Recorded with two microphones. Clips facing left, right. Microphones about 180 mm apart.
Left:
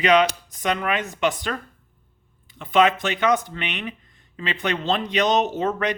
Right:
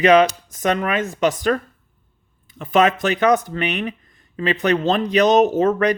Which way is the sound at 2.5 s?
45° right (ahead or behind).